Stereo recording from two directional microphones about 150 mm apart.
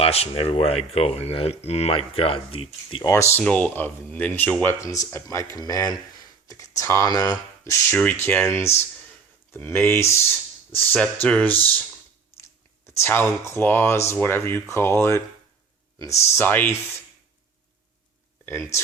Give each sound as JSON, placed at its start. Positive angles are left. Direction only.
{"t": 0.0, "sound": "speech", "side_deg": 40}
{"t": 3.0, "sound": "speech", "side_deg": 20}
{"t": 12.9, "sound": "speech", "side_deg": 15}